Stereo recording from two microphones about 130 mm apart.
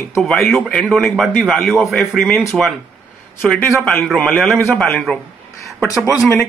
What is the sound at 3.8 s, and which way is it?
A man's voice, centre (ahead or behind).